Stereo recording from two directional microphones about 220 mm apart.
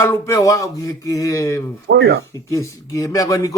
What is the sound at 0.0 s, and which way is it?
Speech, 15° left (ahead or behind).